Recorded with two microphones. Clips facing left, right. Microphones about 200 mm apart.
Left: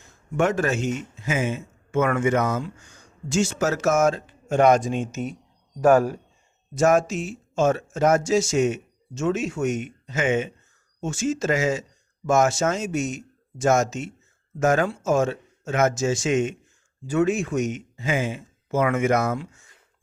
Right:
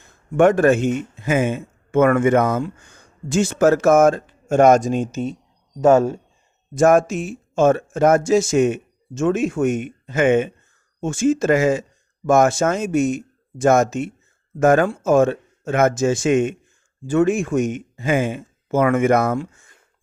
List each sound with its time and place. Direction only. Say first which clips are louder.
0.0 s speech: right 8 dB; 55° right (ahead or behind); by 5.2 s 40° right (ahead or behind)
5.8 s speech: right 3 dB; 25° right (ahead or behind)
6.7 s speech: right 5 dB; 55° right (ahead or behind)